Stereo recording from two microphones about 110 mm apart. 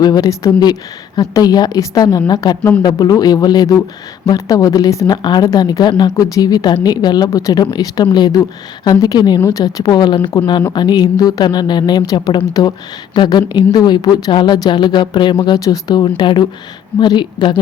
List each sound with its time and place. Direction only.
0.0 s speech: 35° left (ahead or behind)
16.0 s a woman's voice: 45° left (ahead or behind)